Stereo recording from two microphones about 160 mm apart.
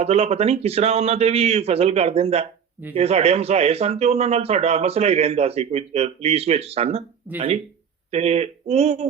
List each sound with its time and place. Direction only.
0.0 s speech: 40° right (ahead or behind)